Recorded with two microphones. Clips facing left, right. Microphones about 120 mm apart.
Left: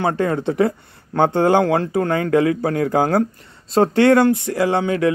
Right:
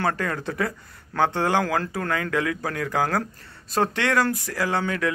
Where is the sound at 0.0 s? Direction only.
25° left (ahead or behind).